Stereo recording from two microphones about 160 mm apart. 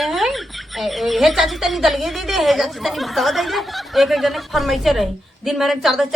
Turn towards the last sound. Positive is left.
turn(degrees=0)  # may be behind; listen again after turning